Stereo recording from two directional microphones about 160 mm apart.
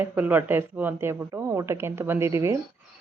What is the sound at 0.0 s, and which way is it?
Speech, 10° right (ahead or behind).